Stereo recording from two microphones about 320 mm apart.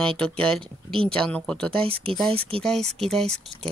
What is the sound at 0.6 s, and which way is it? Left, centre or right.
Speech, centre.